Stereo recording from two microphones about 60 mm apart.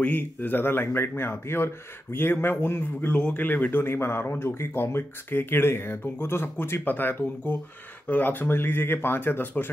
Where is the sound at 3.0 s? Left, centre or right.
Left.